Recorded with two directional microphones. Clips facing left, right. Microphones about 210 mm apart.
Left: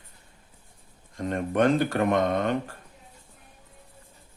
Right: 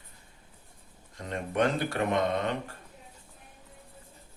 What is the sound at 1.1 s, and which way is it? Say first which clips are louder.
Speech: left 5 dB; 50° left (ahead or behind).